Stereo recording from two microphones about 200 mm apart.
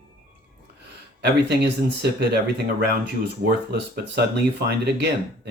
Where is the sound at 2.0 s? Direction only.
55° right (ahead or behind).